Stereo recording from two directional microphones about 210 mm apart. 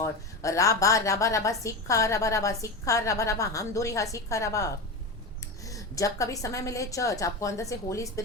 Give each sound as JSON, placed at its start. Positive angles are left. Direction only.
{"t": 0.0, "sound": "a woman's voice", "side_deg": 15}